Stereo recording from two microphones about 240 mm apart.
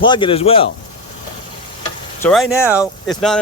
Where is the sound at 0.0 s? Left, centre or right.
Centre.